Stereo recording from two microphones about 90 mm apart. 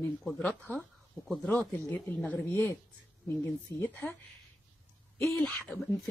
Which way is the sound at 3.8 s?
20° left (ahead or behind).